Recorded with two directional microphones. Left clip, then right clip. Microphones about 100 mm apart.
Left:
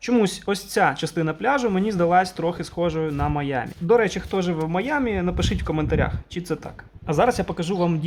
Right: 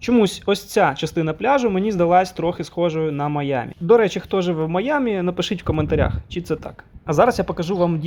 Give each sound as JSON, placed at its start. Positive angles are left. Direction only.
{"t": 0.2, "sound": "speech", "side_deg": -35}